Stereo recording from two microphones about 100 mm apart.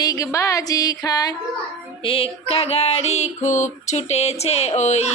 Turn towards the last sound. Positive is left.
turn(degrees=90)